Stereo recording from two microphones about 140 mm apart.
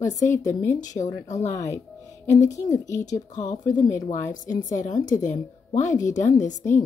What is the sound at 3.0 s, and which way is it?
Speech, 60° left (ahead or behind).